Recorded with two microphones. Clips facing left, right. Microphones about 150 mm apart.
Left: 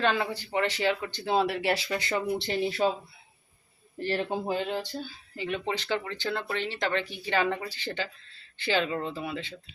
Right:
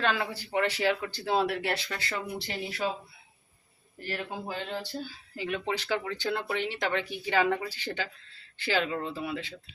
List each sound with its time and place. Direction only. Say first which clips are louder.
0.0 s speech: left 2 dB; centre (ahead or behind)
1.9 s speech: left 6 dB; 20° left (ahead or behind)
4.0 s speech: left 7 dB; 30° left (ahead or behind)
4.8 s speech: left 1 dB; 5° right (ahead or behind)